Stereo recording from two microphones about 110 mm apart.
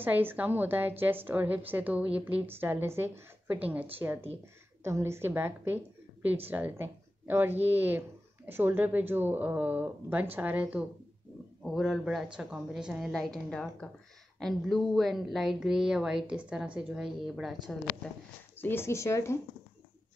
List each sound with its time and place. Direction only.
0.0 s a woman's voice: 20° right (ahead or behind)
11.6 s a woman's voice: centre (ahead or behind)
18.6 s speech: 20° left (ahead or behind)